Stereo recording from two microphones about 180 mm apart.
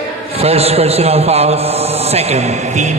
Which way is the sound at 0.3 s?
35° right (ahead or behind).